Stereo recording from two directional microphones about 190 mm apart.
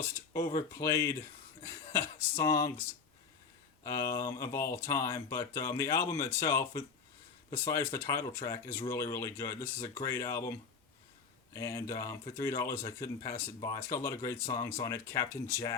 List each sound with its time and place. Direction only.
0.3 s speech: 15° left (ahead or behind)
3.8 s speech: 15° left (ahead or behind)